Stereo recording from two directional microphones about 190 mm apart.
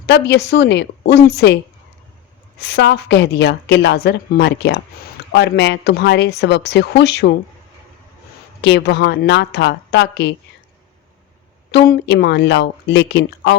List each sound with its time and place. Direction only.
0.0 s a woman's voice: 60° left (ahead or behind)
2.6 s a woman's voice: 65° left (ahead or behind)
8.6 s a woman's voice: 65° left (ahead or behind)
11.7 s a woman's voice: 65° left (ahead or behind)